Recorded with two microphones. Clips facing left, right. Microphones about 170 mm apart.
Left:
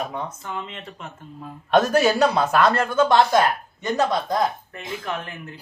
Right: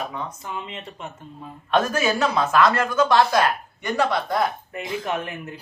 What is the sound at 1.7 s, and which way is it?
Speech, 35° left (ahead or behind).